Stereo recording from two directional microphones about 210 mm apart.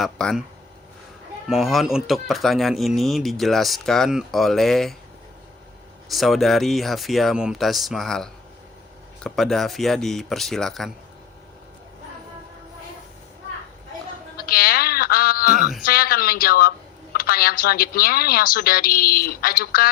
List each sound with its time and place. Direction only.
0.0 s speech: centre (ahead or behind)
1.5 s speech: centre (ahead or behind)
6.1 s speech: centre (ahead or behind)
14.3 s a sound: 45° left (ahead or behind)
15.8 s a woman's voice: 45° left (ahead or behind)